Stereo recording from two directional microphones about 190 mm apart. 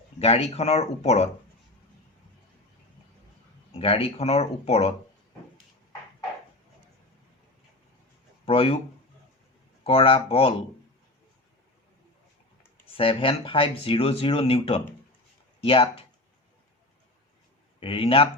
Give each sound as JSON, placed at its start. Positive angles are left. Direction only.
{"t": 0.2, "sound": "speech", "side_deg": 30}
{"t": 3.7, "sound": "speech", "side_deg": 30}
{"t": 8.4, "sound": "speech", "side_deg": 30}
{"t": 9.8, "sound": "speech", "side_deg": 30}
{"t": 13.0, "sound": "speech", "side_deg": 30}
{"t": 17.7, "sound": "speech", "side_deg": 30}